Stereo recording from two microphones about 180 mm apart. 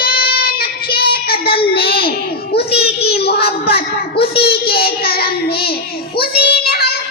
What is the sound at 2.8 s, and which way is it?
Child singing, 60° left (ahead or behind).